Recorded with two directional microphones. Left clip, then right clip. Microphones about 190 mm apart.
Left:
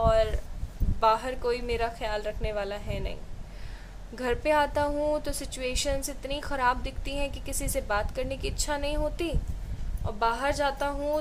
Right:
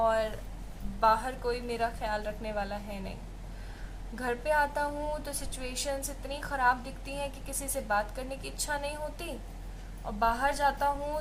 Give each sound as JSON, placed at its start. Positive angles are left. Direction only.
{"t": 0.0, "sound": "a sound", "side_deg": 55}
{"t": 0.9, "sound": "a woman's voice", "side_deg": 60}
{"t": 4.2, "sound": "a woman's voice", "side_deg": 60}